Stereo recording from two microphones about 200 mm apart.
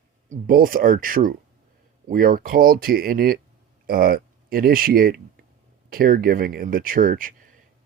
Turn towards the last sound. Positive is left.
turn(degrees=-45)  # may be behind; listen again after turning